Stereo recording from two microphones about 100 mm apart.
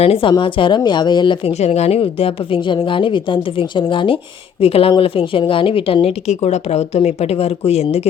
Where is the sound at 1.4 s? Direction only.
90° left; by 4.2 s 55° left (ahead or behind).